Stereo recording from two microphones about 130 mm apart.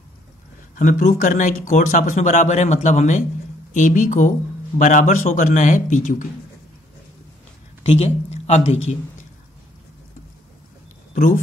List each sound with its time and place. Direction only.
0.7 s speech: 85° left
7.8 s speech: 50° left (ahead or behind)